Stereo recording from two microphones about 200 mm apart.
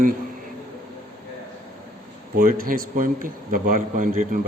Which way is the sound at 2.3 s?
45° right (ahead or behind).